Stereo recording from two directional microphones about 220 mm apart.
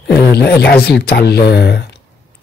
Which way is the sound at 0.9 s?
45° left (ahead or behind).